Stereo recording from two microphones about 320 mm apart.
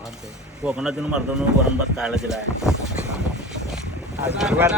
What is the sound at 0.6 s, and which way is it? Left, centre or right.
Speech, centre.